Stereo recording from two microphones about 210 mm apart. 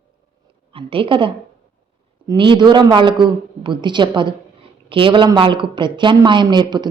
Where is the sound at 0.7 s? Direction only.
25° right (ahead or behind).